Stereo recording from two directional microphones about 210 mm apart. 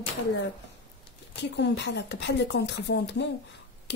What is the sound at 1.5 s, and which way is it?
Speech, 55° left (ahead or behind).